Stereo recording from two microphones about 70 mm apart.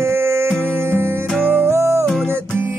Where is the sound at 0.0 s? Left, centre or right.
Right.